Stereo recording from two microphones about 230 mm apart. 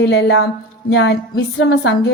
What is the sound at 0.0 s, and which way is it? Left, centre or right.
A woman's voice, left.